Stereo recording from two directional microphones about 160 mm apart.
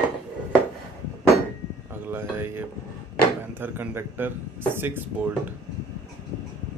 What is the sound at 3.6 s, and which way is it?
Speech, 15° right (ahead or behind).